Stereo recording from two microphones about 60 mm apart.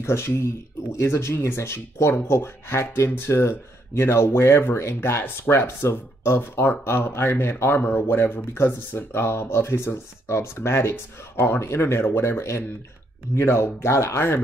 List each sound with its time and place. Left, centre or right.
0.0 s speech: left